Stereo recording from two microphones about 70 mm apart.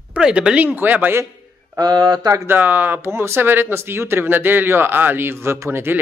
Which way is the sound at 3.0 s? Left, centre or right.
Right.